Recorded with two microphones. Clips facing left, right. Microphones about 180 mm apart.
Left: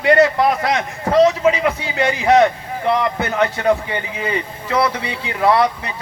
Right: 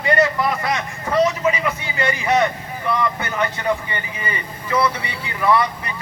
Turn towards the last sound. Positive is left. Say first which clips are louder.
# left 3 dB
turn(degrees=70)  # may be behind; listen again after turning